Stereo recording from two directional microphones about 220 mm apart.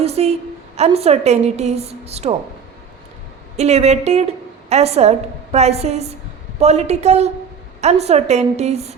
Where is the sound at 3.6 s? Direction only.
30° right (ahead or behind).